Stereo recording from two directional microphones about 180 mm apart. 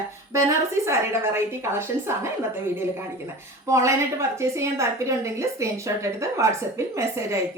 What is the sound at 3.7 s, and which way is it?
A woman's voice, 15° right (ahead or behind).